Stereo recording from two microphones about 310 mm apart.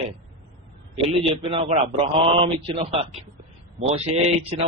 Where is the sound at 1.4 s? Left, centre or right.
Centre.